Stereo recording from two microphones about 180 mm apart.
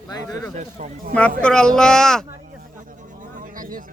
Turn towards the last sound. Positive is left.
turn(degrees=-50)  # may be behind; listen again after turning